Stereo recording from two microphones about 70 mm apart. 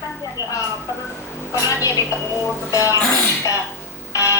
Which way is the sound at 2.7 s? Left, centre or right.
Left.